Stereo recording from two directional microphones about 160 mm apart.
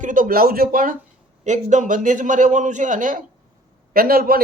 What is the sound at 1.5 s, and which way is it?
A man's voice, 50° right (ahead or behind).